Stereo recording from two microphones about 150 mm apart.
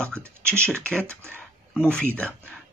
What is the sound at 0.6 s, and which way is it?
Speech, 5° left (ahead or behind).